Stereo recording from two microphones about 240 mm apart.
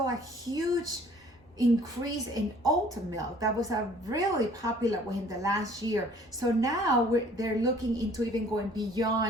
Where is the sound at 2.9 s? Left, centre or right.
Centre.